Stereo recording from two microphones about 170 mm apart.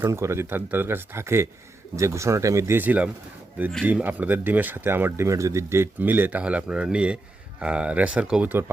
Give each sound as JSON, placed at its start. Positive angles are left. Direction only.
{"t": 0.0, "sound": "speech", "side_deg": -15}